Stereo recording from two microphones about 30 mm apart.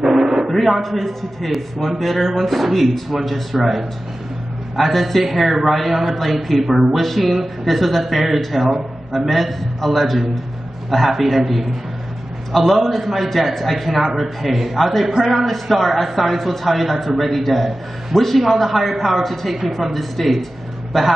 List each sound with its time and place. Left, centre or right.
0.0 s a sound: centre
0.5 s a man's voice: centre
6.6 s speech: centre
7.0 s a man's voice: centre